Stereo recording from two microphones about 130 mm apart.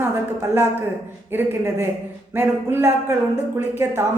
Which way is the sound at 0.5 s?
20° right (ahead or behind).